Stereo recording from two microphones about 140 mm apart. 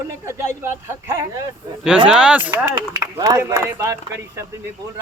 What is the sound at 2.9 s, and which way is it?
Speech, 20° right (ahead or behind).